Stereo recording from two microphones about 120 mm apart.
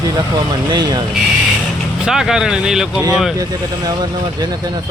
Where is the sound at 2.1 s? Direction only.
5° right (ahead or behind).